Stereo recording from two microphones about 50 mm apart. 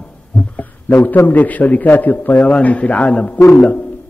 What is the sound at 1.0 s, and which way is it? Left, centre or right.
A man's voice, left.